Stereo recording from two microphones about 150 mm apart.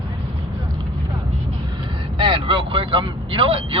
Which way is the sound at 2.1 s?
35° right (ahead or behind).